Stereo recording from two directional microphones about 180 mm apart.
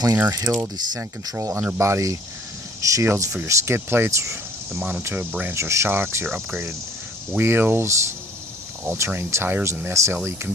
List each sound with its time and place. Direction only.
0.2 s speech: 20° right (ahead or behind)